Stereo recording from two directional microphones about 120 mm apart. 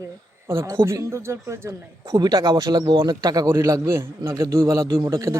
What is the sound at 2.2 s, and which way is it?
Speech, 40° right (ahead or behind).